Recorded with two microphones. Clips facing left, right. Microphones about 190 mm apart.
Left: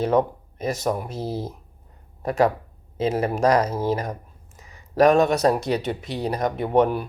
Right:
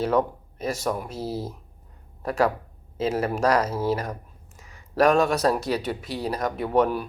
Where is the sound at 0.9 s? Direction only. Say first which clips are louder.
Left 3 dB; 5° left (ahead or behind).